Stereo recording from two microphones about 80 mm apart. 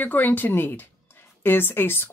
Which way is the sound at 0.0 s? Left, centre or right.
Left.